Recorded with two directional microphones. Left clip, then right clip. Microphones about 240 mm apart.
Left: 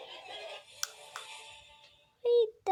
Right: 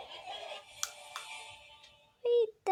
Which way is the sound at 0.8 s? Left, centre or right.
Centre.